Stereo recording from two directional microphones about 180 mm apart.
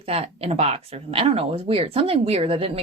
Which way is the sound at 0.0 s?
35° right (ahead or behind).